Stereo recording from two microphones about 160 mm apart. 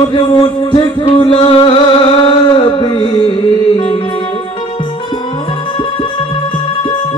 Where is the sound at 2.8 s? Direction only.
30° left (ahead or behind).